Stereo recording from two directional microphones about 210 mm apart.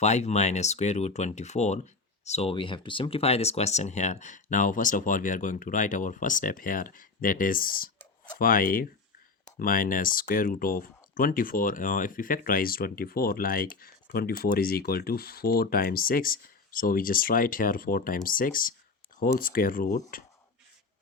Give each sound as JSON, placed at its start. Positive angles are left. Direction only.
{"t": 0.0, "sound": "speech", "side_deg": 30}